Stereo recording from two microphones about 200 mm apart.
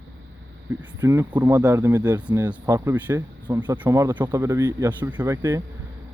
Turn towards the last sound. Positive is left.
turn(degrees=-15)  # may be behind; listen again after turning